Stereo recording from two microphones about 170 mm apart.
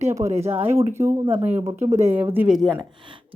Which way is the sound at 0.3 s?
40° right (ahead or behind).